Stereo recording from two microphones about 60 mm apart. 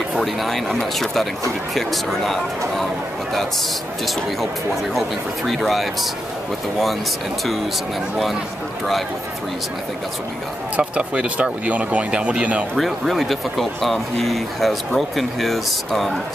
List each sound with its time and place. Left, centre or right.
0.1 s speech: centre
5.5 s speech: centre
10.8 s speech: centre
12.7 s speech: centre